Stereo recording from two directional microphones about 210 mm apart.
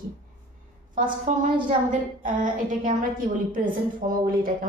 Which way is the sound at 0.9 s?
40° right (ahead or behind).